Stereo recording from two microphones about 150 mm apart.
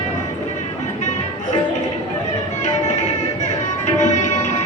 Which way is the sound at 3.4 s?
50° left (ahead or behind).